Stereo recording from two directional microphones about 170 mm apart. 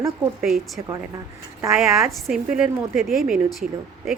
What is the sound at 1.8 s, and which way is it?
A woman's voice, centre (ahead or behind).